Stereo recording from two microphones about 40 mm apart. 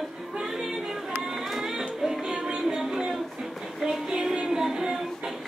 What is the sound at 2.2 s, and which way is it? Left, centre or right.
Music, centre.